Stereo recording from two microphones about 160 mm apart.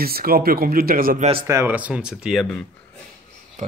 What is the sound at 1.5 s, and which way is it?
Speech, 15° right (ahead or behind).